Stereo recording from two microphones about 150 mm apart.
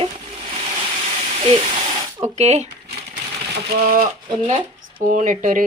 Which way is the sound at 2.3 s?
50° right (ahead or behind).